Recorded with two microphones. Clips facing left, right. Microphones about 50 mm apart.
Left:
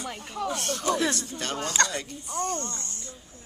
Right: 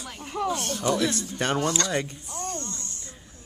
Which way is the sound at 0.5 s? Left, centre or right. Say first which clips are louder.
Even; centre.